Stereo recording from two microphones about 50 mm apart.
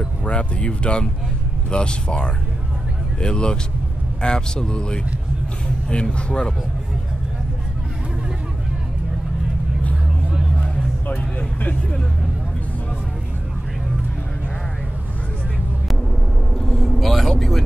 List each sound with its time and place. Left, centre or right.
0.2 s speech: left
10.3 s music: centre
11.1 s vehicle: left
16.5 s vehicle: centre